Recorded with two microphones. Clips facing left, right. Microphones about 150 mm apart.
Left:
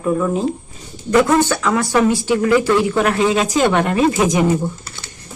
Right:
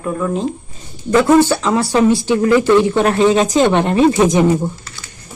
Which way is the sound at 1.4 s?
25° right (ahead or behind).